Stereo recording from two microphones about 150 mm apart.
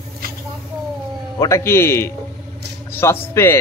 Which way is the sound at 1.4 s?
20° left (ahead or behind).